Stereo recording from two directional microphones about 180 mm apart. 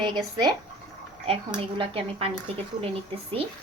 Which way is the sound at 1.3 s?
30° right (ahead or behind).